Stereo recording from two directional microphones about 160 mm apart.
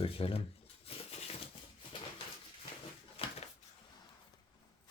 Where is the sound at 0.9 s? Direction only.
40° left (ahead or behind).